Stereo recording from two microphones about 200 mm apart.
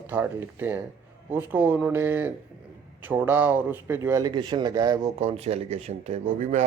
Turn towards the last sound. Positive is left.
turn(degrees=-40)  # may be behind; listen again after turning